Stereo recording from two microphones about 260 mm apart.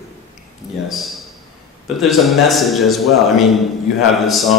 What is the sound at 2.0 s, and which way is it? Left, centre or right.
A man's voice, centre.